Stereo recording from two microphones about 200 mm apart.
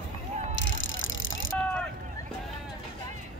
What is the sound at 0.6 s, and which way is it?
Bicycle, 70° left (ahead or behind).